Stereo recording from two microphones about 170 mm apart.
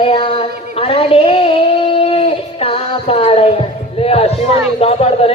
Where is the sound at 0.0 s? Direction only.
35° left (ahead or behind).